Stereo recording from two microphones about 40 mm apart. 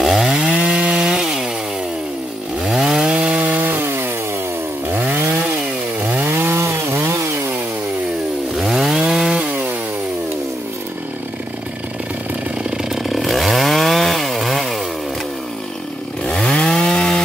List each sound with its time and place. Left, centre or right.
0.0 s chainsaw: centre
0.3 s chainsaw: centre
0.6 s wood: right
1.2 s chainsaw: centre
2.6 s chainsaw: centre; by 3.7 s right
3.7 s wood: right
4.9 s chainsaw: right
6.2 s chainsaw: right
8.5 s chainsaw: centre
12.9 s chainsaw: centre
16.3 s chainsaw: centre
16.8 s wood: centre